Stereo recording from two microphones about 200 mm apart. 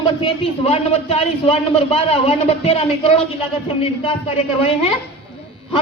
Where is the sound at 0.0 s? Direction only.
25° left (ahead or behind).